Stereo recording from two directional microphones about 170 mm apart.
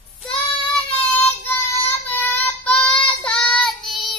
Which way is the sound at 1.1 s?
10° left (ahead or behind).